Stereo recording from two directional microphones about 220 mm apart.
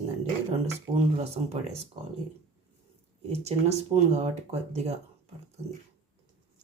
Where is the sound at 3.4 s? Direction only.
30° right (ahead or behind).